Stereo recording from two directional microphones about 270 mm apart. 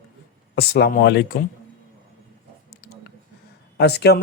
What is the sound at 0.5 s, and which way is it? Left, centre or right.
Speech, left.